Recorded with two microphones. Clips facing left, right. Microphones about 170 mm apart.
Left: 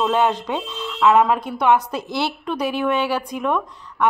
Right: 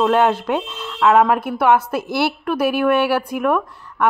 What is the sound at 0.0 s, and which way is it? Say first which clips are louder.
Speech: right 3 dB; 10° right (ahead or behind).